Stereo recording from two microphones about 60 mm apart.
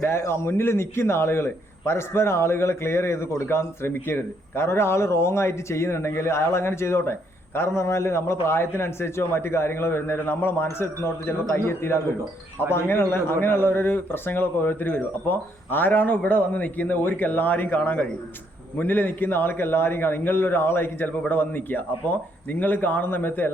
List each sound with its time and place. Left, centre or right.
0.0 s a man's voice: left